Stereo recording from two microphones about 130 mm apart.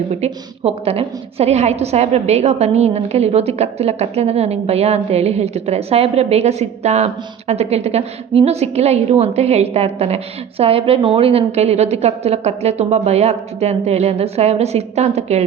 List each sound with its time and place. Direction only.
0.6 s a woman's voice: 50° right (ahead or behind)